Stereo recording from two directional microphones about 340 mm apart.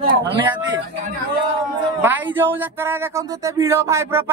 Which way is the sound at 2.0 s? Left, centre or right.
Centre.